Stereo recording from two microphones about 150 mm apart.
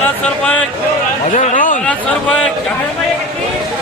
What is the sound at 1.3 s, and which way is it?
Speech, 60° left (ahead or behind).